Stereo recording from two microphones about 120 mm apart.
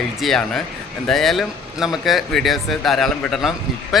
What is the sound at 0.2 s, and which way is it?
Speech, centre (ahead or behind).